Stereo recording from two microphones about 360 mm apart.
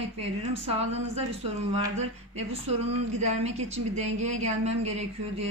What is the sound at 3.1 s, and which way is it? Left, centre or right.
A woman's voice, centre.